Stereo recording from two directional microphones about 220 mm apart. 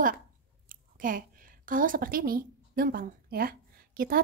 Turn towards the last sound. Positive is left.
turn(degrees=-40)  # may be behind; listen again after turning